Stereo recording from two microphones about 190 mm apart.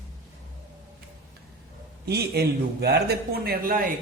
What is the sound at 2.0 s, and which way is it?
A man's voice, 55° right (ahead or behind).